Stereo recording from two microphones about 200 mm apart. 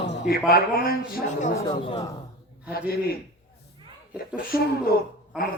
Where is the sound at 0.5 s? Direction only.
50° left (ahead or behind).